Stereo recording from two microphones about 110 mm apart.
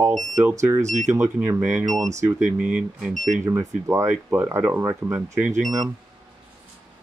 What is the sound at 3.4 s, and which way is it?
Speech, 25° right (ahead or behind).